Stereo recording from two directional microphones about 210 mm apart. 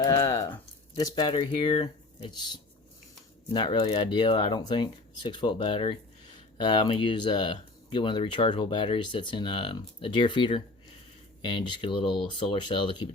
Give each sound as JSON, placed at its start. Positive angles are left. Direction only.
{"t": 0.0, "sound": "speech", "side_deg": 20}